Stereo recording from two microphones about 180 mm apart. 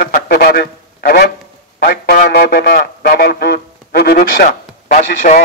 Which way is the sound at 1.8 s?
50° left (ahead or behind).